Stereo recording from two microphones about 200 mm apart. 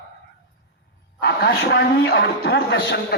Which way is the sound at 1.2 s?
55° left (ahead or behind).